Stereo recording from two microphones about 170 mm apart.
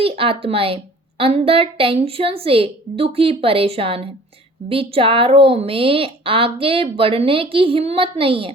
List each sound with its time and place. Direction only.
0.0 s a woman's voice: 30° right (ahead or behind)